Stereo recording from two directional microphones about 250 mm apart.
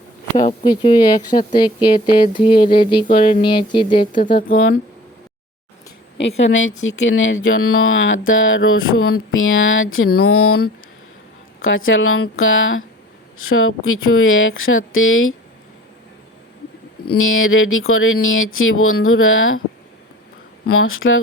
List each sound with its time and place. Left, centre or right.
0.3 s speech: centre
4.4 s speech: left
6.1 s speech: left
17.2 s speech: left
20.7 s speech: left